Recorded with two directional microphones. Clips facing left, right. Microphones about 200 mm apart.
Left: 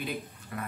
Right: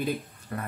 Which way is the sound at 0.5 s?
40° right (ahead or behind).